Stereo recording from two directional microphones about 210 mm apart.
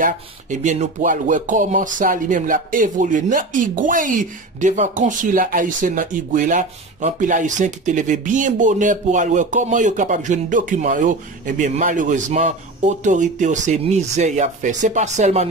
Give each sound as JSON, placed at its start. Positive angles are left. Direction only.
{"t": 0.0, "sound": "speech", "side_deg": -35}